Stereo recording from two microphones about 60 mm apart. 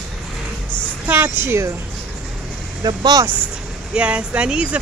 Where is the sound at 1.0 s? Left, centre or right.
Right.